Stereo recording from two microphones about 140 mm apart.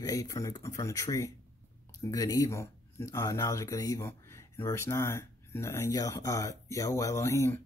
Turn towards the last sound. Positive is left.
turn(degrees=20)  # may be behind; listen again after turning